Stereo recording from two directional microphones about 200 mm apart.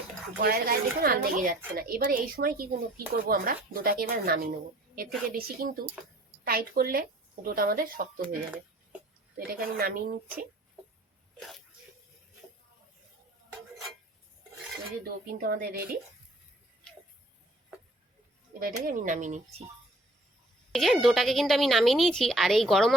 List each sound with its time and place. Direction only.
0.4 s speech: 50° right (ahead or behind)
9.5 s speech: 45° right (ahead or behind)
15.0 s speech: 50° right (ahead or behind)
18.6 s speech: 45° right (ahead or behind)
20.7 s a woman's voice: centre (ahead or behind)